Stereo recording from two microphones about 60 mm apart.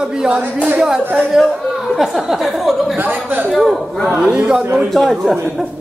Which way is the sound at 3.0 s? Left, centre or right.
Right.